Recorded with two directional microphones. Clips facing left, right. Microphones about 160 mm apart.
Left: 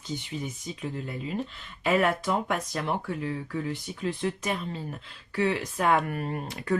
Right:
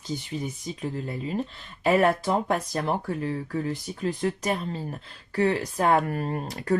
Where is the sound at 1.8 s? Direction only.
35° right (ahead or behind).